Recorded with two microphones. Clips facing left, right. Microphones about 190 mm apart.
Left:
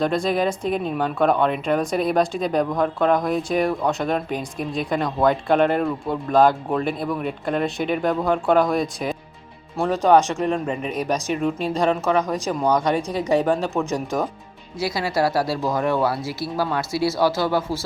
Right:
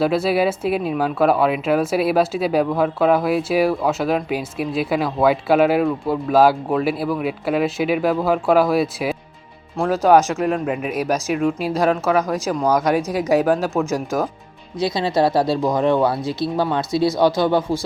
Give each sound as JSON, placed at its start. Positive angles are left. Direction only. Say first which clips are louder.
{"t": 0.0, "sound": "speech", "louder": "right 3 dB", "side_deg": -5}
{"t": 14.8, "sound": "speech", "louder": "right 4 dB", "side_deg": -20}